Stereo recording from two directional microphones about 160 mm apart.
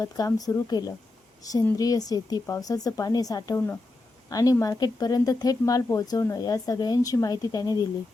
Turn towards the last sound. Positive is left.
turn(degrees=25)  # may be behind; listen again after turning